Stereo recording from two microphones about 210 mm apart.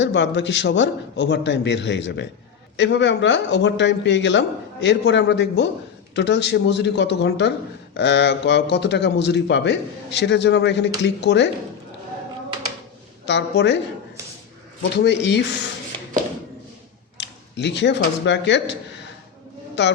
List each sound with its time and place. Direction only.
0.0 s a man's voice: 55° left (ahead or behind)
13.2 s a man's voice: 55° left (ahead or behind)
17.2 s speech: 55° left (ahead or behind)